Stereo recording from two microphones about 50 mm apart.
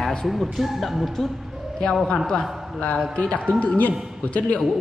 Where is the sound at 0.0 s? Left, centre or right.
Centre.